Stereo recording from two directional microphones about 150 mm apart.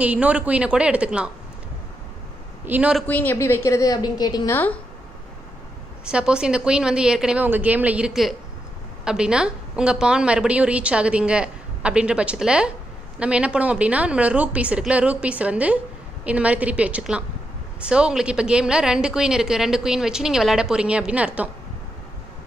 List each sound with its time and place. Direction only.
0.0 s a woman's voice: 10° right (ahead or behind)
2.6 s a woman's voice: 10° right (ahead or behind)
3.1 s a woman's voice: 10° left (ahead or behind)
6.0 s a woman's voice: 5° right (ahead or behind)